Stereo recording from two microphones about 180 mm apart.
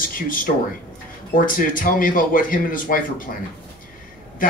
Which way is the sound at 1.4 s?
50° left (ahead or behind).